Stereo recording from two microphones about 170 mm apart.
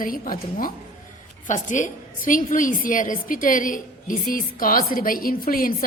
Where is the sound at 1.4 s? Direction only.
45° left (ahead or behind).